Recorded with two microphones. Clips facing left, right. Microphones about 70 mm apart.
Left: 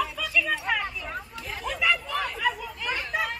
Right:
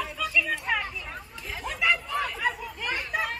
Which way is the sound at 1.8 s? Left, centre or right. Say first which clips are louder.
Even; centre.